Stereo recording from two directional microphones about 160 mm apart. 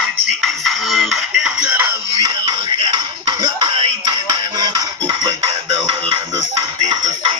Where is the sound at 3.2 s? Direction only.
25° right (ahead or behind).